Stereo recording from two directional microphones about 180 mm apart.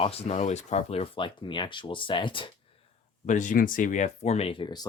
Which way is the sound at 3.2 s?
45° left (ahead or behind).